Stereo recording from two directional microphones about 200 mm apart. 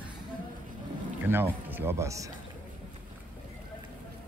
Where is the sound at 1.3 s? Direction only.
10° right (ahead or behind).